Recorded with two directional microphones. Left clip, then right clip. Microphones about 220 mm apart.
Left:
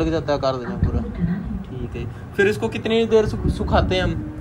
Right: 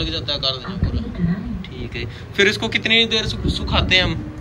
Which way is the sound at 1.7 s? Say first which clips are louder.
Right 3 dB; 5° left (ahead or behind).